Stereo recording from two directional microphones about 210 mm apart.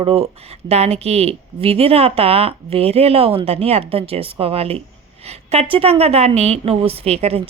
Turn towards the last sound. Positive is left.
turn(degrees=-30)  # may be behind; listen again after turning